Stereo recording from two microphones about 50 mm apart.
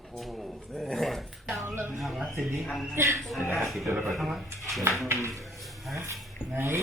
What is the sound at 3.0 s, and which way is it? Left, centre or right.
Speech, right.